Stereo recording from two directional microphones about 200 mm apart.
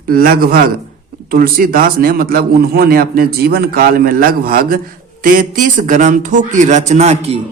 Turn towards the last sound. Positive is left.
turn(degrees=-35)  # may be behind; listen again after turning